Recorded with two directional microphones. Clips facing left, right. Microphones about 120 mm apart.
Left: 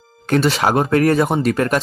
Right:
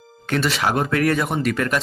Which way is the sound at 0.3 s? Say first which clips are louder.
Left 5 dB; 30° left (ahead or behind).